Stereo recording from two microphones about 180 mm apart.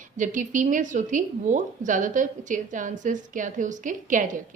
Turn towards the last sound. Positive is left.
turn(degrees=-45)  # may be behind; listen again after turning